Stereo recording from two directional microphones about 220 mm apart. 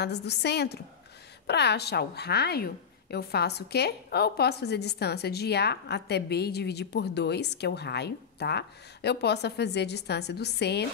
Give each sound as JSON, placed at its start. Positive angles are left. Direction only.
{"t": 0.0, "sound": "a woman's voice", "side_deg": 50}